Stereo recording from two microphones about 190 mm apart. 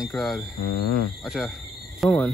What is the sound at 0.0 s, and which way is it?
Speech, centre (ahead or behind).